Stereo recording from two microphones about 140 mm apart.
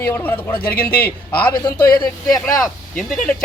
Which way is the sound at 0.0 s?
15° left (ahead or behind).